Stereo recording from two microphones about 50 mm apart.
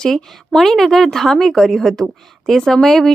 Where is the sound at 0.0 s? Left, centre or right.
Centre.